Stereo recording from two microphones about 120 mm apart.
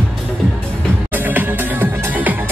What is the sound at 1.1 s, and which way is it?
Music, 15° right (ahead or behind).